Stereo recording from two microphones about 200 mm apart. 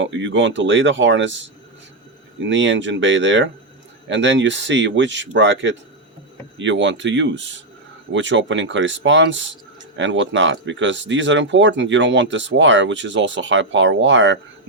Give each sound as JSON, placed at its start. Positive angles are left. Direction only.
{"t": 0.0, "sound": "speech", "side_deg": -65}